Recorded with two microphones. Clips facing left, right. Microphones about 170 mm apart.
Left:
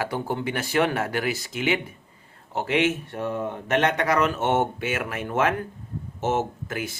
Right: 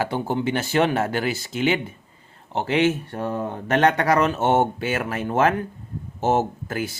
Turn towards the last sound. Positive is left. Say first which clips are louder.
# right 3 dB
turn(degrees=-30)  # may be behind; listen again after turning